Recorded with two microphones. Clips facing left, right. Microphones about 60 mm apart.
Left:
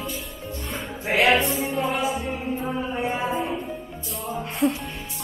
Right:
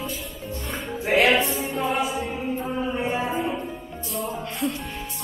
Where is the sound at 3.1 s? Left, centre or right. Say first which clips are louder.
Even; centre.